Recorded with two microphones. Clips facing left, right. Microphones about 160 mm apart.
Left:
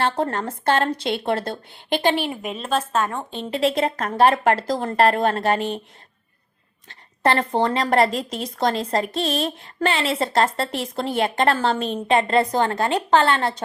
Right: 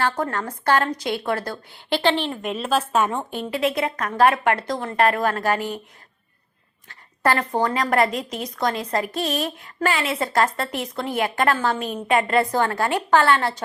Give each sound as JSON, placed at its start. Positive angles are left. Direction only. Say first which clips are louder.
{"t": 0.0, "sound": "speech", "louder": "left 2 dB", "side_deg": 25}
{"t": 3.5, "sound": "a woman's voice", "louder": "left 3 dB", "side_deg": 30}
{"t": 6.8, "sound": "a sound", "louder": "left 1 dB", "side_deg": 25}
{"t": 7.5, "sound": "a woman's voice", "louder": "left 2 dB", "side_deg": 25}